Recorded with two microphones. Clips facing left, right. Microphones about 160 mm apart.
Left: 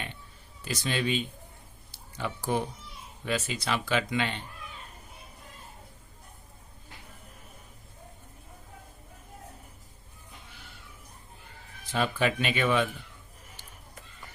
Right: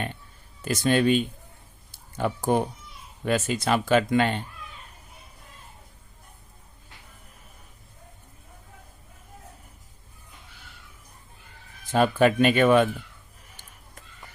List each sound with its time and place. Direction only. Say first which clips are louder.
0.6 s speech: right 9 dB; 50° right (ahead or behind)
1.9 s a sound: right 8 dB; 50° right (ahead or behind)
3.2 s speech: right 7 dB; 50° right (ahead or behind)
11.9 s speech: right 8 dB; 50° right (ahead or behind)